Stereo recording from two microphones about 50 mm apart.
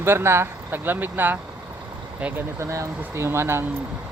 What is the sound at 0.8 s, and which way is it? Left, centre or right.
Speech, right.